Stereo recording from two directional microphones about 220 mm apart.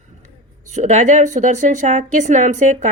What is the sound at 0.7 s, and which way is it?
A woman's voice, 30° right (ahead or behind).